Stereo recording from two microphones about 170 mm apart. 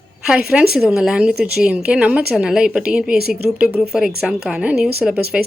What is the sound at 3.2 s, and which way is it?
Speech, 70° right (ahead or behind).